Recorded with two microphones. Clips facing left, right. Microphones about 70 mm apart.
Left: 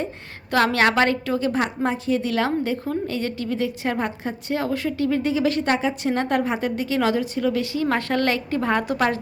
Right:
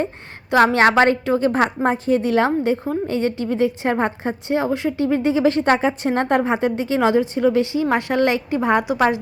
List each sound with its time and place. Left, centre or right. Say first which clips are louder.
0.5 s a woman's voice: right 5 dB; right